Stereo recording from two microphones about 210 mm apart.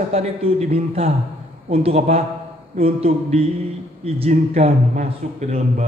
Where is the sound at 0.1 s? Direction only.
30° right (ahead or behind).